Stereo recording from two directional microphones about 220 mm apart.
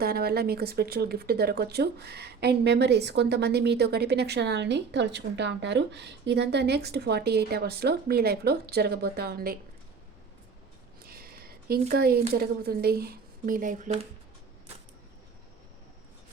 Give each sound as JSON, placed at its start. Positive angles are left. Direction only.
{"t": 0.0, "sound": "speech", "side_deg": -45}
{"t": 11.0, "sound": "a sound", "side_deg": -40}
{"t": 12.3, "sound": "speech", "side_deg": -45}